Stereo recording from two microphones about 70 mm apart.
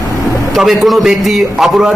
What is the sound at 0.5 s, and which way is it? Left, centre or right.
A man's voice, centre.